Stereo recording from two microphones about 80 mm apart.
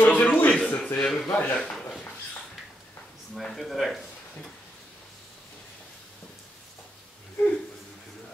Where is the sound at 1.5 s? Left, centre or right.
Centre.